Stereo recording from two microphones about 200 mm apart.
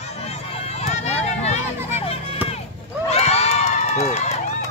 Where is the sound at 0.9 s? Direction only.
35° left (ahead or behind).